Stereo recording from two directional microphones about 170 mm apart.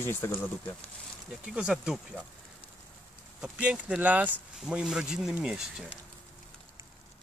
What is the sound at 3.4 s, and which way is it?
Speech, 5° right (ahead or behind).